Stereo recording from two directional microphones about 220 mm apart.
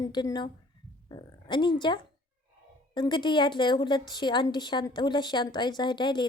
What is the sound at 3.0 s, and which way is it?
Speech, 20° left (ahead or behind).